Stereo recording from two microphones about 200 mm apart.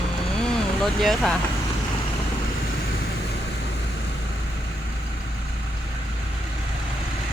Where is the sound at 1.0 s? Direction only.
Centre (ahead or behind).